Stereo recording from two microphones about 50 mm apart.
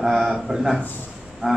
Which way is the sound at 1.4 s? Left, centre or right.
Right.